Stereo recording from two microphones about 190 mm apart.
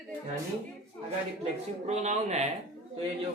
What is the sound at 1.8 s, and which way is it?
Speech, 35° right (ahead or behind).